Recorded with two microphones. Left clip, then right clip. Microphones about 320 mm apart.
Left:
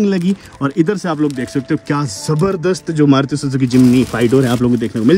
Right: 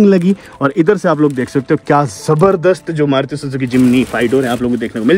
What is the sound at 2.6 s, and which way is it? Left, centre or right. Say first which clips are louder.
A man's voice: right 2 dB; centre.